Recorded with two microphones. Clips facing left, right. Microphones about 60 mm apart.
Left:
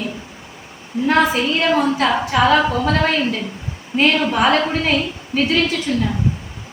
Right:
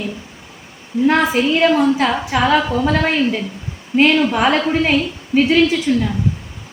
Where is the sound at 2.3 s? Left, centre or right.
Centre.